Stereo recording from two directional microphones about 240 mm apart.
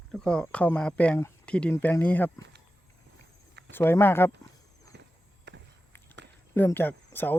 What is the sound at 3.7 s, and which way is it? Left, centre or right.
Speech, centre.